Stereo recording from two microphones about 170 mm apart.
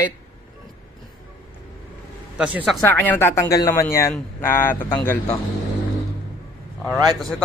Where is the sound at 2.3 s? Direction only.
5° right (ahead or behind).